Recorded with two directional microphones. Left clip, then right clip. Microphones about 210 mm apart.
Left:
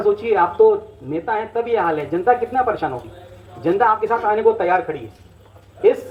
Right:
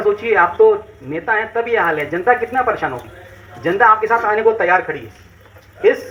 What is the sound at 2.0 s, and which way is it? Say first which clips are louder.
A man's voice: right 2 dB; 35° left (ahead or behind).